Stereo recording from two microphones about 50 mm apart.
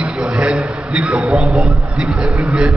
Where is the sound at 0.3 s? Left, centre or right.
Centre.